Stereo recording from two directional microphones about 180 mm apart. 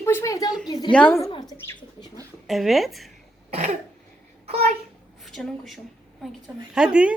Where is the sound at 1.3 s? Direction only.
25° left (ahead or behind).